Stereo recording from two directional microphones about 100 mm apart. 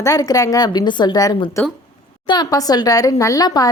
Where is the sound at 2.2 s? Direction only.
40° left (ahead or behind).